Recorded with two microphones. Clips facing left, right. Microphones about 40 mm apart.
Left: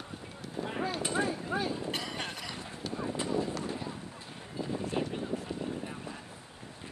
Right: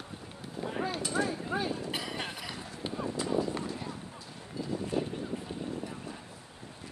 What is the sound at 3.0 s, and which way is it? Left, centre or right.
Vehicle, left.